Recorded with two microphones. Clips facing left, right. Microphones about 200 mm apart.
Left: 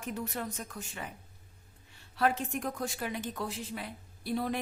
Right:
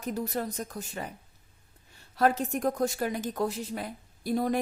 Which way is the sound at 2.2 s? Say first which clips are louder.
Right 5 dB; 40° right (ahead or behind).